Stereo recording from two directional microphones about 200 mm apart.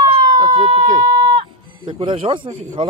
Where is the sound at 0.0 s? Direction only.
20° right (ahead or behind).